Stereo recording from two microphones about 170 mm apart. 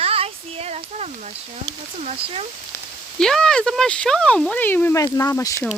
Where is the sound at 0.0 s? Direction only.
35° right (ahead or behind).